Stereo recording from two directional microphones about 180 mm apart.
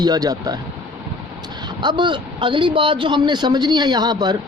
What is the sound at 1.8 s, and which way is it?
Speech, 25° right (ahead or behind).